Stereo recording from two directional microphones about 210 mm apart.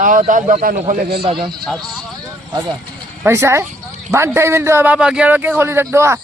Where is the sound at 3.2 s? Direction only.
10° right (ahead or behind).